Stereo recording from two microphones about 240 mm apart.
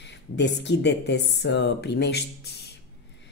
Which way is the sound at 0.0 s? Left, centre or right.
Left.